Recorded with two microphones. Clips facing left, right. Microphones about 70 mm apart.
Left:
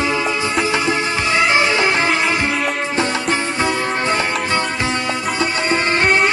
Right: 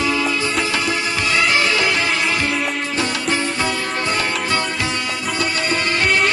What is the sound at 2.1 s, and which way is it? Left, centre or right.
Music, centre.